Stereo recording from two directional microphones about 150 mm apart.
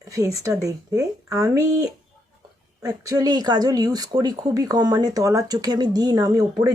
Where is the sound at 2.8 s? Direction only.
25° right (ahead or behind).